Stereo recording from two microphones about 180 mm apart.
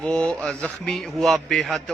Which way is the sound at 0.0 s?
5° left (ahead or behind).